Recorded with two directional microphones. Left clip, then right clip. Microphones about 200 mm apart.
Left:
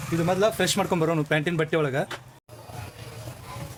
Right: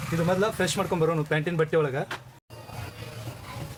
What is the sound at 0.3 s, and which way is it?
Speech, 40° left (ahead or behind).